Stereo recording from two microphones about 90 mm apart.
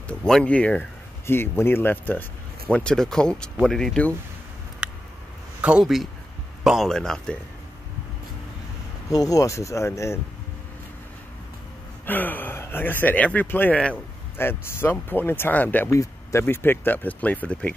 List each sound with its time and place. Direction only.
0.2 s speech: 10° left (ahead or behind)
1.2 s speech: 25° left (ahead or behind)
2.7 s speech: 10° left (ahead or behind)
4.8 s a sound: 10° right (ahead or behind)
5.6 s speech: 10° right (ahead or behind)
6.9 s speech: 5° left (ahead or behind)
9.1 s speech: 45° left (ahead or behind)
12.1 s speech: 20° left (ahead or behind)
15.9 s speech: 35° left (ahead or behind); by 17.7 s 15° left (ahead or behind)